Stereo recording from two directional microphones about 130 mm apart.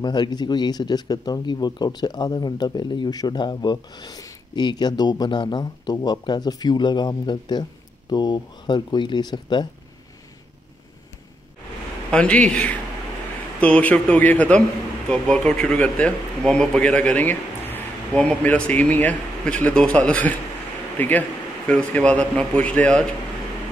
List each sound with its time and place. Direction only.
0.0 s speech: 35° left (ahead or behind)
12.1 s speech: 10° left (ahead or behind)